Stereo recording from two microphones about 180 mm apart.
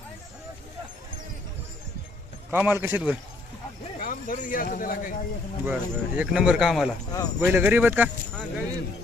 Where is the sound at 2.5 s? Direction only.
10° right (ahead or behind).